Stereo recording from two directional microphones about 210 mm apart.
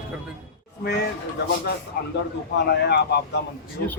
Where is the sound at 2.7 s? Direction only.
50° left (ahead or behind).